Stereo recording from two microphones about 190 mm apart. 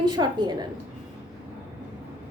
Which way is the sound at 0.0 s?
20° right (ahead or behind).